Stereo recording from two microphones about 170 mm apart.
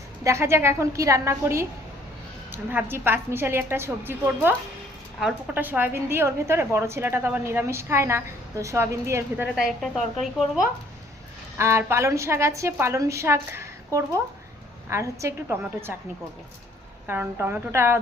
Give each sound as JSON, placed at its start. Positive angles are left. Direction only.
{"t": 0.3, "sound": "a woman's voice", "side_deg": -15}
{"t": 9.6, "sound": "a woman's voice", "side_deg": 0}
{"t": 11.5, "sound": "a woman's voice", "side_deg": -15}
{"t": 17.1, "sound": "a woman's voice", "side_deg": -15}